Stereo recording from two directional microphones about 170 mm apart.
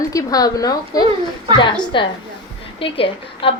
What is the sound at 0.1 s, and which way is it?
A woman's voice, 20° left (ahead or behind).